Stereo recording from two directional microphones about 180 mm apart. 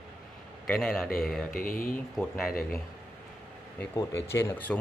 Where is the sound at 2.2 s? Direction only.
Centre (ahead or behind).